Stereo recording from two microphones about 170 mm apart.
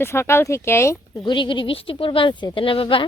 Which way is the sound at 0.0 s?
15° left (ahead or behind).